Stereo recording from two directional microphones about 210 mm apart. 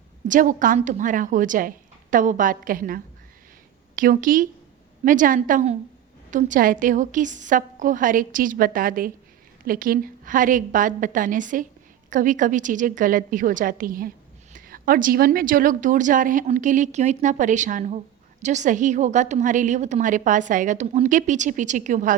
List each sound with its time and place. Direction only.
0.3 s a woman's voice: 40° right (ahead or behind)